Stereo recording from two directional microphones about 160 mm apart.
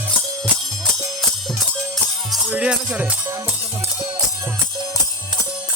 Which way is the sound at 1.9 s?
5° right (ahead or behind).